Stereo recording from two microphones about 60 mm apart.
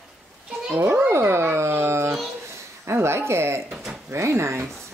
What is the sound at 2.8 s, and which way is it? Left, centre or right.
Speech, right.